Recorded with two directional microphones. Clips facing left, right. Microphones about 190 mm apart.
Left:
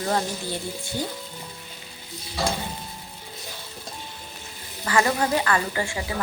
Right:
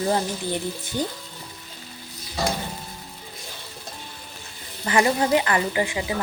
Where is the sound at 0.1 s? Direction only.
20° right (ahead or behind).